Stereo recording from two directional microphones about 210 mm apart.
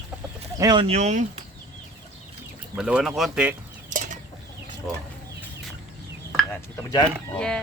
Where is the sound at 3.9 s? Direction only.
40° right (ahead or behind).